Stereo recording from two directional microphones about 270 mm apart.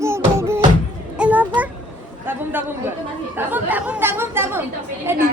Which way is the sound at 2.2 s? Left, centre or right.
Centre.